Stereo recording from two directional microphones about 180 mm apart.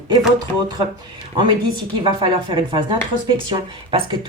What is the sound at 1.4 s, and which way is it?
A woman's voice, 25° right (ahead or behind).